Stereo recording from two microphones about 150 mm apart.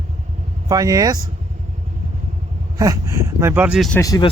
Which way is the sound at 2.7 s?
20° right (ahead or behind).